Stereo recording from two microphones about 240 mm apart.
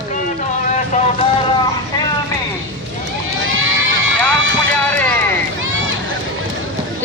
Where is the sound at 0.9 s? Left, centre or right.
Left.